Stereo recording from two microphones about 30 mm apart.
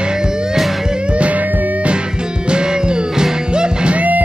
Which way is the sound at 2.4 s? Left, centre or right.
Right.